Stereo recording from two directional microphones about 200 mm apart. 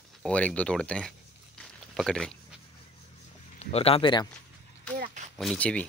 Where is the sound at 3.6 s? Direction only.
30° left (ahead or behind).